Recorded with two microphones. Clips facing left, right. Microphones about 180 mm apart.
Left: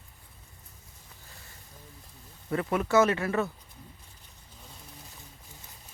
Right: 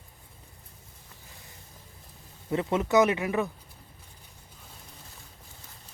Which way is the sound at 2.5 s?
20° right (ahead or behind).